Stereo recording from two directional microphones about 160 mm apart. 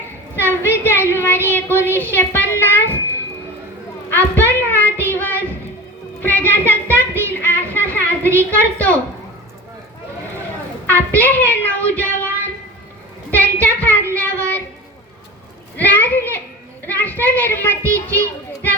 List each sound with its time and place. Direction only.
0.6 s a woman's voice: 15° left (ahead or behind)
4.1 s child singing: 10° left (ahead or behind)
8.4 s speech: 10° left (ahead or behind)
10.8 s a sound: 10° left (ahead or behind)
13.7 s child singing: 10° left (ahead or behind)
15.8 s a sound: 10° left (ahead or behind)
16.8 s children playing: 10° left (ahead or behind)